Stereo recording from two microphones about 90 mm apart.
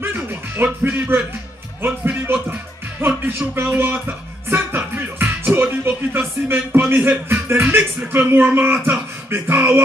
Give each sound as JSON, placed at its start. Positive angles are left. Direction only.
{"t": 0.0, "sound": "music", "side_deg": -20}
{"t": 3.3, "sound": "speech", "side_deg": -25}
{"t": 4.5, "sound": "music", "side_deg": -25}
{"t": 8.3, "sound": "speech", "side_deg": -20}